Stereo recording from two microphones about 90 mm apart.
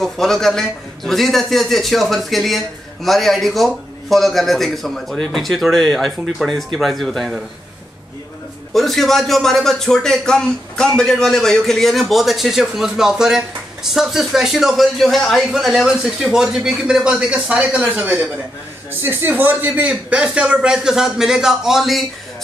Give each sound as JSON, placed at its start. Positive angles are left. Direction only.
{"t": 0.0, "sound": "a man's voice", "side_deg": 5}
{"t": 8.7, "sound": "a man's voice", "side_deg": 0}